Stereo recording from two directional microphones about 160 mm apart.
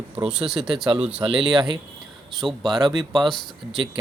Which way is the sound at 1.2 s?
30° right (ahead or behind).